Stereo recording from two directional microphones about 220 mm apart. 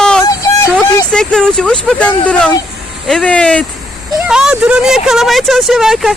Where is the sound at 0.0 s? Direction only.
5° left (ahead or behind).